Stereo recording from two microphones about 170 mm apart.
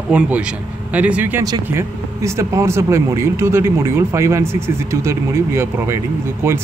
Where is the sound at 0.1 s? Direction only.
5° right (ahead or behind).